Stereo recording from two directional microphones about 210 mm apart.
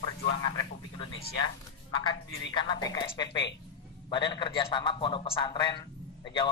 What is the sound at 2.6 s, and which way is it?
A man's voice, 20° left (ahead or behind).